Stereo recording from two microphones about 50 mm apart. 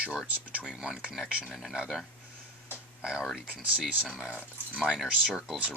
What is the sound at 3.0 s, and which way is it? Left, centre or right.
Speech, centre.